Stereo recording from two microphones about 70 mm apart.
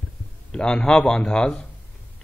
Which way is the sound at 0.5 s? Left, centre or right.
Centre.